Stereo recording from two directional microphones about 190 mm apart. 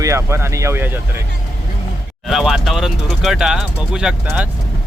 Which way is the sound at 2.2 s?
Centre (ahead or behind).